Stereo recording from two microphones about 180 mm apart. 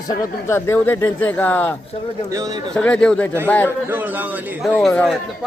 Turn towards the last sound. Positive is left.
turn(degrees=5)  # may be behind; listen again after turning